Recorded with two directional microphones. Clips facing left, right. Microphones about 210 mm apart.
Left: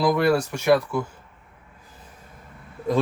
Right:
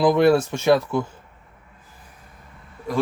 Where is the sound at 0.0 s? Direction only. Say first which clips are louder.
Right 4 dB; 25° right (ahead or behind).